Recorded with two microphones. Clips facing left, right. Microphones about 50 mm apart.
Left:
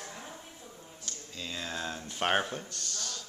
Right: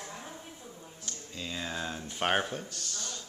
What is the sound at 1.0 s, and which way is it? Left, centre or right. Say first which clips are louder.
Speech: right 1 dB; centre.